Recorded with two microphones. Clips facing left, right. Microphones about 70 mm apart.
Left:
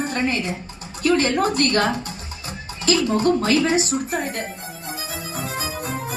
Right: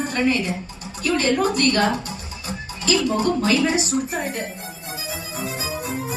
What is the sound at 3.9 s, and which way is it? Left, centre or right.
Speech, centre.